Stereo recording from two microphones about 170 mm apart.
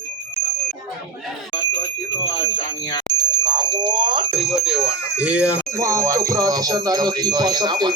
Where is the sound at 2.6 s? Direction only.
25° left (ahead or behind).